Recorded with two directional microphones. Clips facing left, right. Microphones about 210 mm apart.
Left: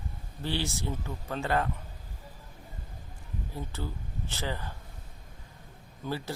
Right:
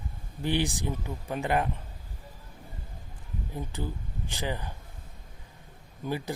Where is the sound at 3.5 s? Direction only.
15° right (ahead or behind).